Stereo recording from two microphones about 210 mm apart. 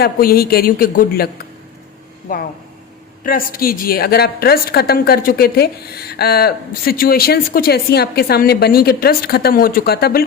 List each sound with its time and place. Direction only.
0.0 s a woman's voice: 45° left (ahead or behind)
2.3 s a woman's voice: 40° left (ahead or behind)